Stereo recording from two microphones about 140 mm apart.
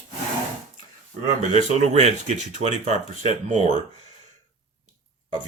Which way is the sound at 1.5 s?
55° right (ahead or behind).